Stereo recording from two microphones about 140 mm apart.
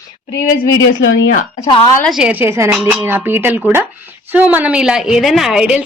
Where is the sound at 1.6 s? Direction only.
35° left (ahead or behind).